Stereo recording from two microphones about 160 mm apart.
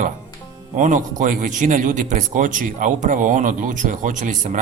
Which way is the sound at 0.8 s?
50° right (ahead or behind).